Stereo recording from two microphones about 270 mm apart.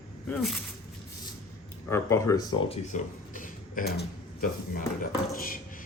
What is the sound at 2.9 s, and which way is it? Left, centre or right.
Speech, left.